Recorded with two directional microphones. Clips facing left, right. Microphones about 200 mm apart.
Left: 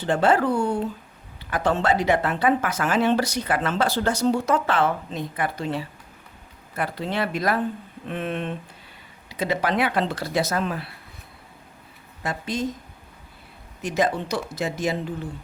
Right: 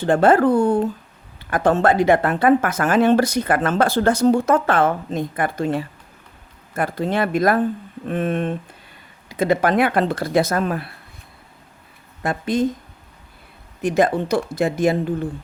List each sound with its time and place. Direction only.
0.0 s speech: 50° right (ahead or behind)
12.2 s speech: 55° right (ahead or behind)
13.8 s speech: 55° right (ahead or behind)